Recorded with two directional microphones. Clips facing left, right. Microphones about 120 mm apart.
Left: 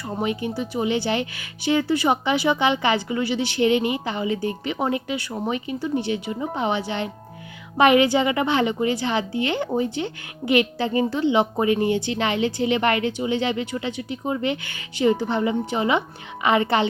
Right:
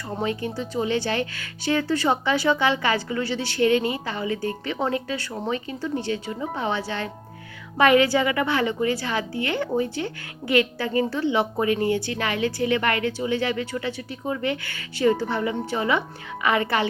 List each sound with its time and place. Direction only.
0.2 s a woman's voice: 15° left (ahead or behind)